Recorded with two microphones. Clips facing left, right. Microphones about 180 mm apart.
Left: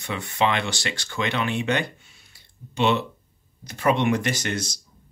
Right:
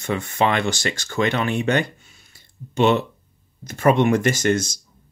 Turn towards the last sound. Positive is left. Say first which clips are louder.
# right 8 dB
turn(degrees=-45)  # may be behind; listen again after turning